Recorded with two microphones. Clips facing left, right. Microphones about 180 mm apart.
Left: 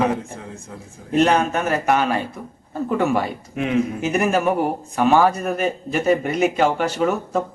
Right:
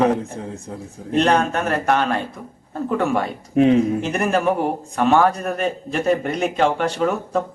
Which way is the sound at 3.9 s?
5° left (ahead or behind).